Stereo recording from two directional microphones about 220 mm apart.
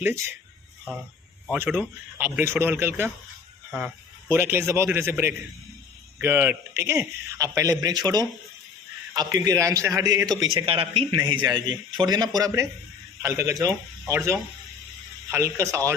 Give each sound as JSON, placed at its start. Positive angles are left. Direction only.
{"t": 0.0, "sound": "a man's voice", "side_deg": -10}
{"t": 1.5, "sound": "a man's voice", "side_deg": -10}